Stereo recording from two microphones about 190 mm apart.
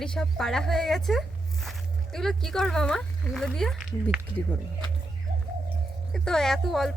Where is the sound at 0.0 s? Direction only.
5° left (ahead or behind).